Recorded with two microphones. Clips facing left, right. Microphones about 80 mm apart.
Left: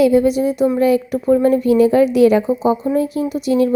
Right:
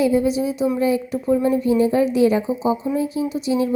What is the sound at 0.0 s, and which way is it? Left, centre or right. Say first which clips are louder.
A woman's voice: left 5 dB; left.